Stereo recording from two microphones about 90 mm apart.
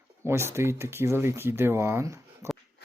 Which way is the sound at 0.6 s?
30° right (ahead or behind).